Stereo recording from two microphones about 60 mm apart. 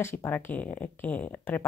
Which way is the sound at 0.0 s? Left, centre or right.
Left.